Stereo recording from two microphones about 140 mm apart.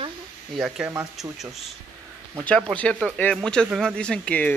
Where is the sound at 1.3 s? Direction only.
Centre (ahead or behind).